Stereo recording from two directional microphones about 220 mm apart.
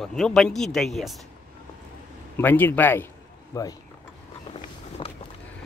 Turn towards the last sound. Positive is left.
turn(degrees=15)  # may be behind; listen again after turning